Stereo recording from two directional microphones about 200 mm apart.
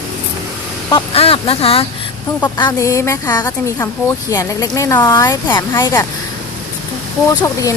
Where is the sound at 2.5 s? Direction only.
20° left (ahead or behind).